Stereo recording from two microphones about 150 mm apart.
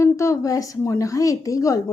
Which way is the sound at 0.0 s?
20° left (ahead or behind).